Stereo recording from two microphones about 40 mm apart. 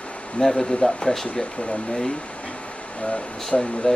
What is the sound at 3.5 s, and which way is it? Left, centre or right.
Speech, left.